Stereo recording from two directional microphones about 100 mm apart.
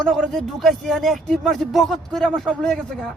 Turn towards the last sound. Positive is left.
turn(degrees=5)  # may be behind; listen again after turning